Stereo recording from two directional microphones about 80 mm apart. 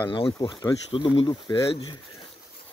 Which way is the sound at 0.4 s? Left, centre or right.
Left.